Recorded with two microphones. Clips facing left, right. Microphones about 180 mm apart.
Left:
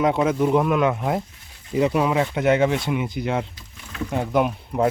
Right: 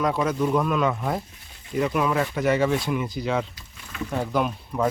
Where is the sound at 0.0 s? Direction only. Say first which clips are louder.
Left 4 dB; 25° left (ahead or behind).